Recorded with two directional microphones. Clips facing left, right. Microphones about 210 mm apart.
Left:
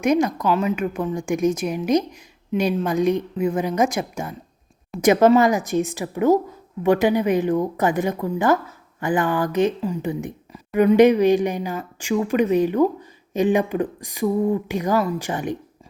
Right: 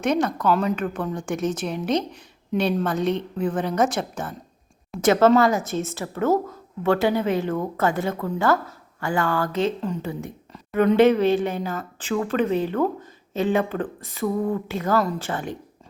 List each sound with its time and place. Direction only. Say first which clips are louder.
0.0 s speech: left 3 dB; 10° left (ahead or behind)